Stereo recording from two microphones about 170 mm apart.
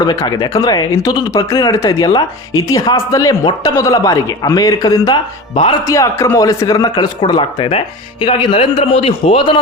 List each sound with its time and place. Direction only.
0.0 s a man's voice: 25° left (ahead or behind)